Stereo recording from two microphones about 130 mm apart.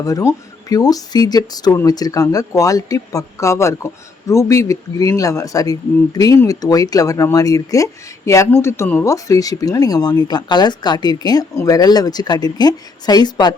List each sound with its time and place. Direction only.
0.0 s speech: 25° left (ahead or behind)